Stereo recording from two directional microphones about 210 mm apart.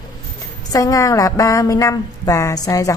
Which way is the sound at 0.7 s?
15° left (ahead or behind).